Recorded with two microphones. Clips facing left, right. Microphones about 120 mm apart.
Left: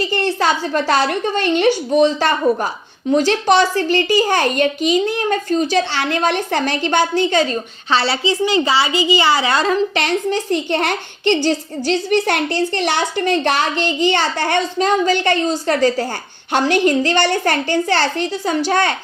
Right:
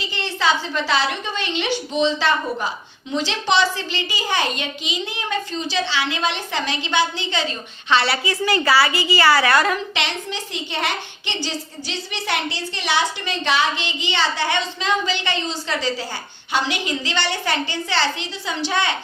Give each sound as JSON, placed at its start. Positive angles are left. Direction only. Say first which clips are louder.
{"t": 0.0, "sound": "a woman's voice", "louder": "left 6 dB", "side_deg": 50}
{"t": 7.9, "sound": "a woman's voice", "louder": "left 2 dB", "side_deg": 30}
{"t": 9.9, "sound": "a woman's voice", "louder": "left 8 dB", "side_deg": 45}